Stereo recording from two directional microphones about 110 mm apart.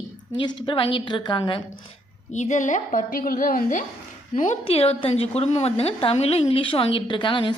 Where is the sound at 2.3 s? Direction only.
90° left.